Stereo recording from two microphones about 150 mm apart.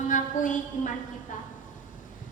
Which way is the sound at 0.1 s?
60° left (ahead or behind).